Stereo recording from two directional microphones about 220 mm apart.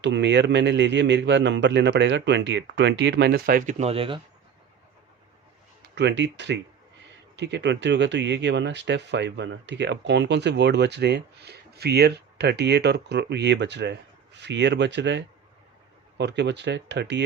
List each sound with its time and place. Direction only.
0.0 s speech: 50° right (ahead or behind); by 4.2 s 25° right (ahead or behind)
5.9 s speech: 50° right (ahead or behind)